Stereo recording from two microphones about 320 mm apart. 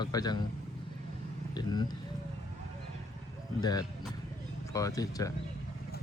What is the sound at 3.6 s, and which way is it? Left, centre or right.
Speech, centre.